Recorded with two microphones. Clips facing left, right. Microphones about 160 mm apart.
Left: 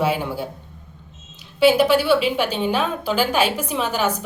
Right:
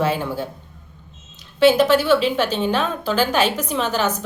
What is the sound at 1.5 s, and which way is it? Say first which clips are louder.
A woman's voice: right 1 dB; 10° left (ahead or behind).